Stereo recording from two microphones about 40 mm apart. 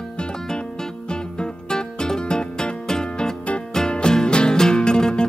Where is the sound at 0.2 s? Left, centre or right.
Left.